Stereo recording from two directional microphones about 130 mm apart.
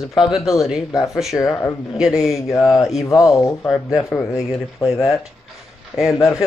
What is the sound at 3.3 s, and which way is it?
Speech, 25° left (ahead or behind).